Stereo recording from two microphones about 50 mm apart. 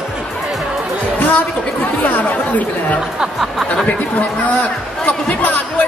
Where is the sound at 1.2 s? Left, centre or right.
Left.